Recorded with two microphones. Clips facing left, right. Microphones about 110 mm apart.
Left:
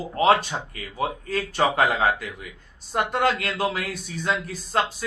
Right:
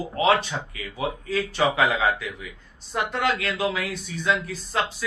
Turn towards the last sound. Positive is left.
turn(degrees=40)  # may be behind; listen again after turning